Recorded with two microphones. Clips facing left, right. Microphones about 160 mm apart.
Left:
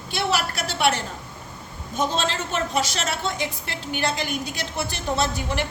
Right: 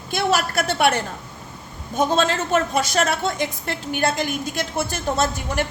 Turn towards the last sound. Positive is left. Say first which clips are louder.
# right 2 dB
turn(degrees=-45)  # may be behind; listen again after turning